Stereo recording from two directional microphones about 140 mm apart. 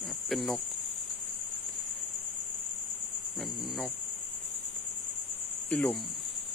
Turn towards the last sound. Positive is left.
turn(degrees=10)  # may be behind; listen again after turning